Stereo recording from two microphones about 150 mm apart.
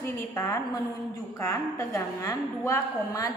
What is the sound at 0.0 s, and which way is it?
A woman's voice, 20° left (ahead or behind).